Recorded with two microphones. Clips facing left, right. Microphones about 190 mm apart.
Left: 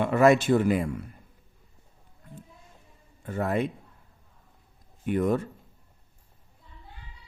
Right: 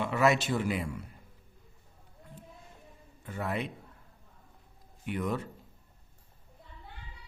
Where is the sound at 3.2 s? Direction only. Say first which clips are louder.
Left 7 dB; 45° left (ahead or behind).